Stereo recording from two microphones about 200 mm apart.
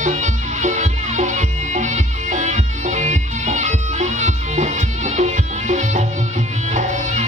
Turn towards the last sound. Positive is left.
turn(degrees=-35)  # may be behind; listen again after turning